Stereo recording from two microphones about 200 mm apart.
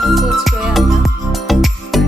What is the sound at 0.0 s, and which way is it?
Music, centre (ahead or behind).